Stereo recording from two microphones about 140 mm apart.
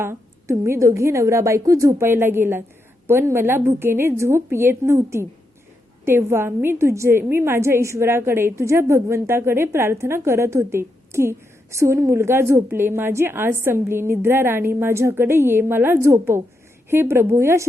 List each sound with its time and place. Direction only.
0.0 s a woman's voice: 20° right (ahead or behind)